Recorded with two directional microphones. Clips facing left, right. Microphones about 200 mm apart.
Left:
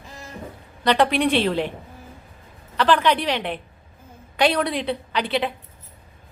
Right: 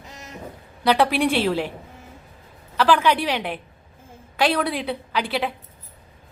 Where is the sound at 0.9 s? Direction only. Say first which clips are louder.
Even; 5° right (ahead or behind).